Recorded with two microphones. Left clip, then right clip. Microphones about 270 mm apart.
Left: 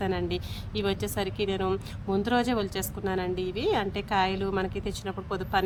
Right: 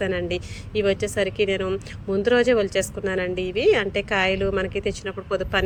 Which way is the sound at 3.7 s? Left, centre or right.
Centre.